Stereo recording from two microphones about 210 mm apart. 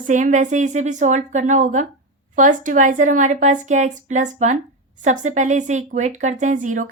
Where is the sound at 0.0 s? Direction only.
35° right (ahead or behind).